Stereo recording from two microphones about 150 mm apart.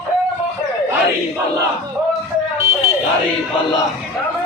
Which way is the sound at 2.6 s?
20° right (ahead or behind).